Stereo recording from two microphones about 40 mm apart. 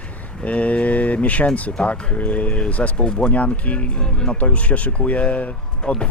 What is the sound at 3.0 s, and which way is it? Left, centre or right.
Speech, left.